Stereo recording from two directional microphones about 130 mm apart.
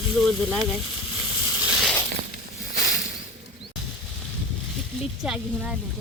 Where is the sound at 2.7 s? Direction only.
90° left.